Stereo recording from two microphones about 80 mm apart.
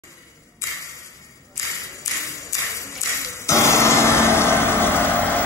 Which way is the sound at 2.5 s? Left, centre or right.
Left.